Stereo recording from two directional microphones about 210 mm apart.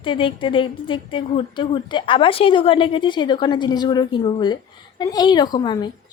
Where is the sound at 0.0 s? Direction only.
25° left (ahead or behind).